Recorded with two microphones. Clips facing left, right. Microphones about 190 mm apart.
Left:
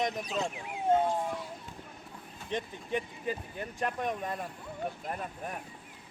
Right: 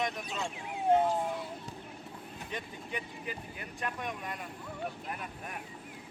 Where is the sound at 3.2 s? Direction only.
35° left (ahead or behind).